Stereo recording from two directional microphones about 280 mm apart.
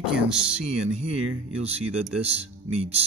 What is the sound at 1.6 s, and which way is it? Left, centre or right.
Speech, right.